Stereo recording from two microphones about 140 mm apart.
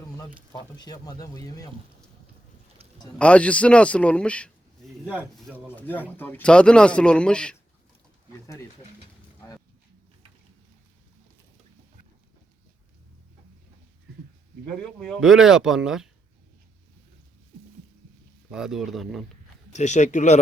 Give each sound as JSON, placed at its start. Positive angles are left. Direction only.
{"t": 0.8, "sound": "speech", "side_deg": 30}
{"t": 3.2, "sound": "speech", "side_deg": 10}
{"t": 14.8, "sound": "speech", "side_deg": 5}
{"t": 18.5, "sound": "speech", "side_deg": -5}
{"t": 19.7, "sound": "speech", "side_deg": 55}